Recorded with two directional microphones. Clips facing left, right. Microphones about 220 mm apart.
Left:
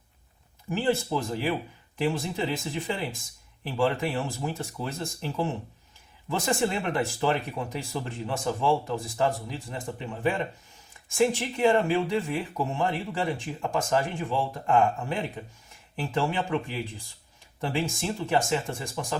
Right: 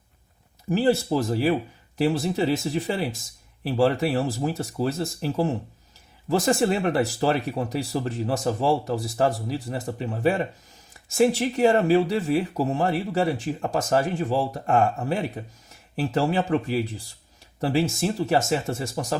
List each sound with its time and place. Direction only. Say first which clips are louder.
0.7 s speech: right 5 dB; 35° right (ahead or behind)